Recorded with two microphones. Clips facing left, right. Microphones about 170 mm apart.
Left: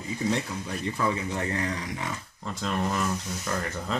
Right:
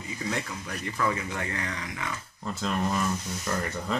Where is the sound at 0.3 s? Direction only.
25° left (ahead or behind).